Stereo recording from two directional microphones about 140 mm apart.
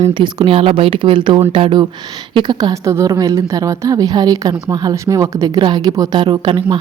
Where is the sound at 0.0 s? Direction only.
35° right (ahead or behind).